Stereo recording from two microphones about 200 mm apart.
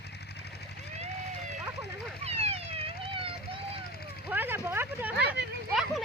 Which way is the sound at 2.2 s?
30° right (ahead or behind).